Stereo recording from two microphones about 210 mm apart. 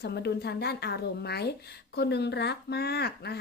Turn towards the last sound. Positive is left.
turn(degrees=50)  # may be behind; listen again after turning